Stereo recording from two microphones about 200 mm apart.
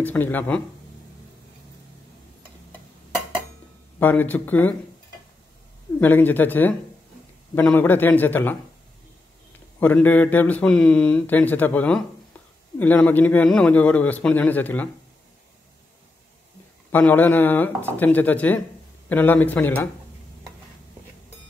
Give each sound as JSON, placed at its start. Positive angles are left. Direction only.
{"t": 0.0, "sound": "speech", "side_deg": 10}
{"t": 4.0, "sound": "speech", "side_deg": 10}
{"t": 5.9, "sound": "speech", "side_deg": 10}
{"t": 9.8, "sound": "speech", "side_deg": 10}
{"t": 16.9, "sound": "speech", "side_deg": 10}